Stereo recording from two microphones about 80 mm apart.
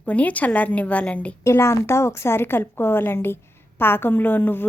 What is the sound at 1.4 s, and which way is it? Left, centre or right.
A woman's voice, left.